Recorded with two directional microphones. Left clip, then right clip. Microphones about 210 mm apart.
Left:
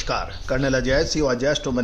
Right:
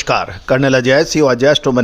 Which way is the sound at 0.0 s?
35° right (ahead or behind).